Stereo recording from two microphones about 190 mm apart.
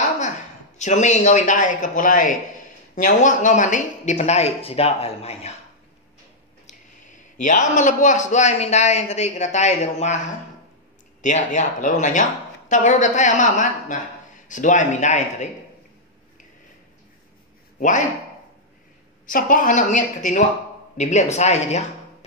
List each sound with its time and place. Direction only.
0.7 s speech: 40° left (ahead or behind)
6.7 s a man's voice: 40° left (ahead or behind)
17.7 s a man's voice: 40° left (ahead or behind)
19.2 s a woman's voice: 45° left (ahead or behind)